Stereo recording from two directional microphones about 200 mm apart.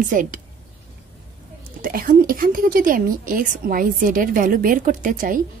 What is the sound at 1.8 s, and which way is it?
Speech, 45° right (ahead or behind).